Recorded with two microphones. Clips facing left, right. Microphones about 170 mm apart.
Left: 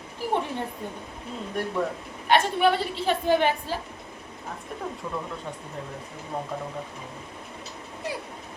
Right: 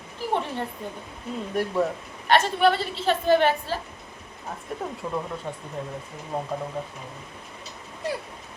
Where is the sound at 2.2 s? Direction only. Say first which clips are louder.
Right 1 dB; 15° left (ahead or behind).